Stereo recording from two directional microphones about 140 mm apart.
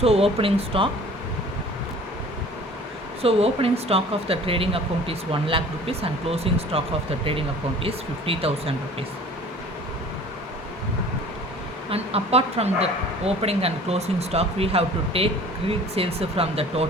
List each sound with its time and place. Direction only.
0.0 s speech: 45° right (ahead or behind)
3.2 s speech: 45° right (ahead or behind)
11.9 s speech: 45° right (ahead or behind)